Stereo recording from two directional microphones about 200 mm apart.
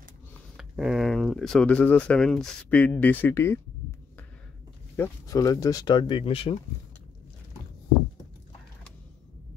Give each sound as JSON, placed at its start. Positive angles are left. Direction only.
{"t": 0.6, "sound": "speech", "side_deg": 0}
{"t": 4.9, "sound": "speech", "side_deg": 15}